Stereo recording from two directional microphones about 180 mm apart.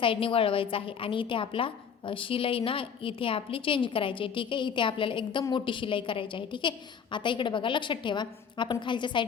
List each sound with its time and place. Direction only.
0.0 s a woman's voice: 30° left (ahead or behind)